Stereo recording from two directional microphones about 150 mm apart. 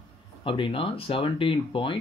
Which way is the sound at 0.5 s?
35° left (ahead or behind).